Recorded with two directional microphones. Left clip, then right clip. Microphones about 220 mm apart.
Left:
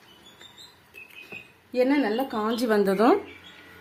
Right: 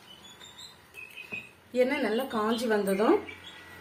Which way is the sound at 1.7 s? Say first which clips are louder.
Left 3 dB; 40° left (ahead or behind).